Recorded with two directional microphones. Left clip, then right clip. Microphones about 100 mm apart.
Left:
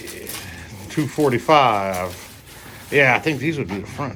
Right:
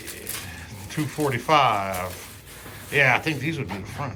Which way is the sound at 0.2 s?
30° right (ahead or behind).